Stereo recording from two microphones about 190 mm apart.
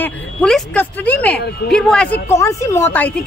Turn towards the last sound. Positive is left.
turn(degrees=10)  # may be behind; listen again after turning